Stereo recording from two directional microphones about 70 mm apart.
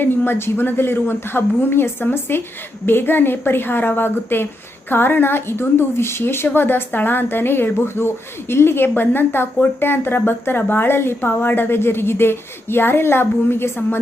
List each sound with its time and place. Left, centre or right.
0.0 s a woman's voice: left